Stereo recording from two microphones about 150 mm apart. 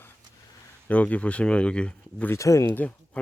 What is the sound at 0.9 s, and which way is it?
Speech, 10° left (ahead or behind).